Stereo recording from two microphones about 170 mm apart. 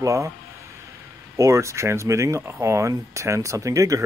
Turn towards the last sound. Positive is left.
turn(degrees=-20)  # may be behind; listen again after turning